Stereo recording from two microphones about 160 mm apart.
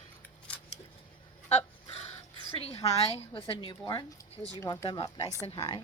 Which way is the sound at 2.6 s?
40° left (ahead or behind).